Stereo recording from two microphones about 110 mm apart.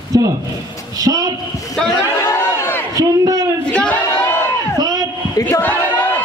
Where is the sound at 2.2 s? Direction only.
25° left (ahead or behind).